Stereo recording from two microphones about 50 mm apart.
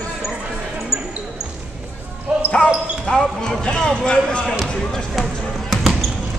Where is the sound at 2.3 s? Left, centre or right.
Centre.